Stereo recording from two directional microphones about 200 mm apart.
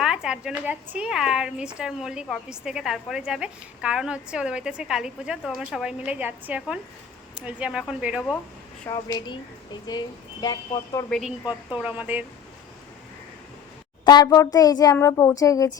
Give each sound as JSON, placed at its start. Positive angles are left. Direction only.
{"t": 0.0, "sound": "speech", "side_deg": -5}
{"t": 8.9, "sound": "speech", "side_deg": 20}
{"t": 11.1, "sound": "speech", "side_deg": 0}
{"t": 14.0, "sound": "speech", "side_deg": 20}